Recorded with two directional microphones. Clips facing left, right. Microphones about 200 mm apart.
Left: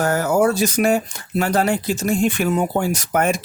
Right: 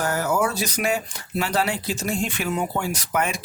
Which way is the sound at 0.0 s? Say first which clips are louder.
Left 6 dB; 45° left (ahead or behind).